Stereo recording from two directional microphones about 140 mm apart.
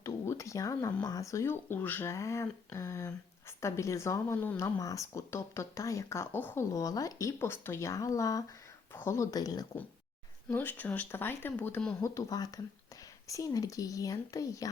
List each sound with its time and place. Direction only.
0.0 s a sound: 20° left (ahead or behind)
1.0 s speech: 25° left (ahead or behind)
10.5 s speech: 15° left (ahead or behind)
11.9 s speech: 20° left (ahead or behind)